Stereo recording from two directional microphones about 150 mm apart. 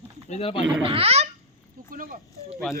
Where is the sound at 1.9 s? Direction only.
70° right (ahead or behind).